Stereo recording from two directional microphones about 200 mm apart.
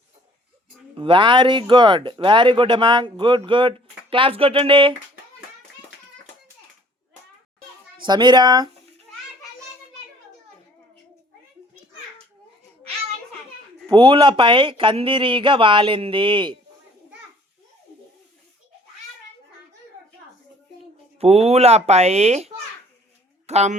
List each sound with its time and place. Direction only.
0.9 s speech: 25° right (ahead or behind)
8.0 s speech: 20° right (ahead or behind)
13.8 s speech: 25° right (ahead or behind)
21.2 s speech: 30° right (ahead or behind)